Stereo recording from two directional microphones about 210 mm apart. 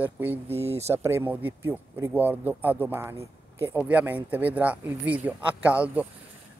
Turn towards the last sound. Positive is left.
turn(degrees=-5)  # may be behind; listen again after turning